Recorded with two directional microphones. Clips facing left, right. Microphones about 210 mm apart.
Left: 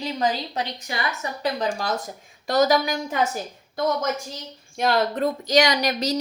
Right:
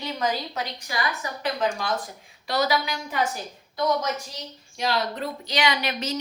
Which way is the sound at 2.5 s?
45° left (ahead or behind).